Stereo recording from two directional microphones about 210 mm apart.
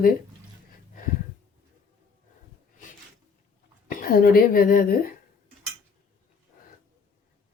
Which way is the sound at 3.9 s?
40° left (ahead or behind).